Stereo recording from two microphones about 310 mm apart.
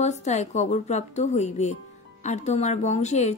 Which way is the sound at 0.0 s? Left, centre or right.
Left.